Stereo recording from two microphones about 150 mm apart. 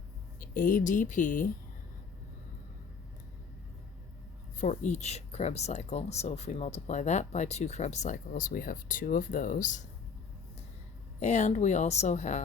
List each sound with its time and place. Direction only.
0.3 s speech: 70° left (ahead or behind)
4.5 s speech: 55° left (ahead or behind)
11.2 s speech: 50° left (ahead or behind)